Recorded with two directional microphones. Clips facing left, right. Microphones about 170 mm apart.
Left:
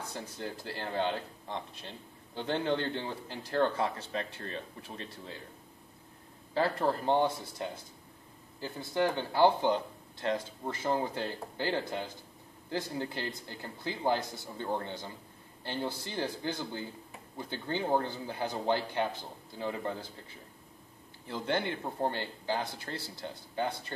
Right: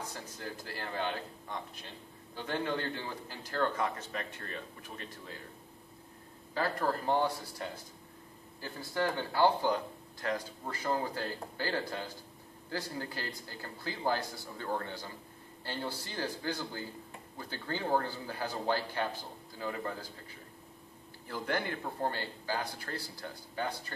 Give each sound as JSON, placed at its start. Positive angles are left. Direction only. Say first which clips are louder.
{"t": 0.1, "sound": "a man's voice", "louder": "left 3 dB", "side_deg": 25}
{"t": 6.5, "sound": "a man's voice", "louder": "left 3 dB", "side_deg": 25}
{"t": 21.3, "sound": "a man's voice", "louder": "left 2 dB", "side_deg": 25}